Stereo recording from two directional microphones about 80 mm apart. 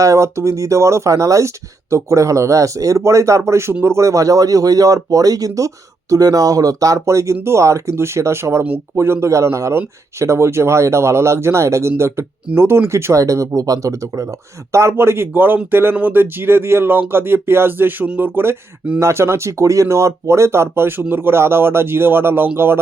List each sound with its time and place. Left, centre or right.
0.0 s speech: right